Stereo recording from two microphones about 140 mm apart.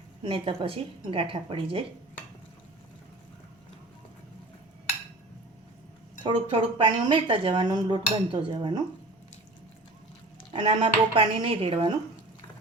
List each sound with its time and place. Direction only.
0.2 s speech: 40° right (ahead or behind)
6.2 s speech: 35° right (ahead or behind)
10.5 s speech: 35° right (ahead or behind)